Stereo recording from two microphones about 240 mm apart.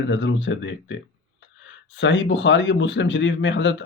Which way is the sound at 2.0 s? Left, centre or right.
Left.